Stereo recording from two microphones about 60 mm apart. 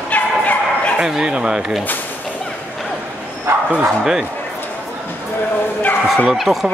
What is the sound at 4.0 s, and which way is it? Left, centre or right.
Speech, centre.